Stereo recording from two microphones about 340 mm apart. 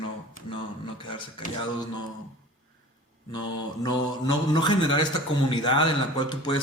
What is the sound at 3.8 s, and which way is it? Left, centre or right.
Speech, centre.